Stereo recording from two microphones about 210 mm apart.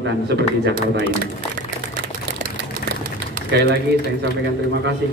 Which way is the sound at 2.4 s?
50° right (ahead or behind).